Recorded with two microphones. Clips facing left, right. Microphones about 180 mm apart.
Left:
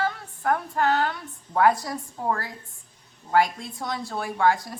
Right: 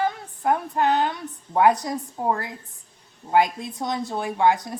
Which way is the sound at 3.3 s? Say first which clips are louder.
Right 2 dB; 20° right (ahead or behind).